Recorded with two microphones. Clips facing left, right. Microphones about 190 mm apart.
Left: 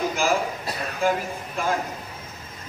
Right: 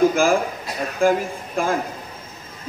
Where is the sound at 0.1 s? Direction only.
50° right (ahead or behind).